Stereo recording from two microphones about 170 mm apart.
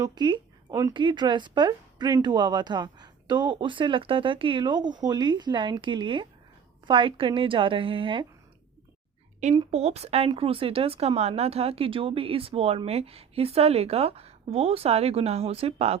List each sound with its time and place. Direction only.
0.0 s speech: 25° right (ahead or behind)
9.6 s speech: 40° right (ahead or behind)